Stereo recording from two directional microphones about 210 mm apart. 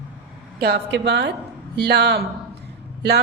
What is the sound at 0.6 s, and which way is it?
A woman's voice, 50° right (ahead or behind).